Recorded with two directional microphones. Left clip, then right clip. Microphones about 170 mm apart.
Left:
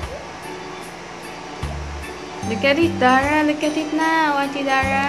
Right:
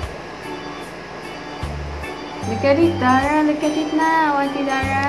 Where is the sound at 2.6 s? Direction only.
20° left (ahead or behind).